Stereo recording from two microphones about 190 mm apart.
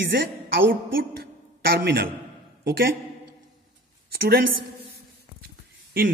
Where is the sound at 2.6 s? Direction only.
50° right (ahead or behind).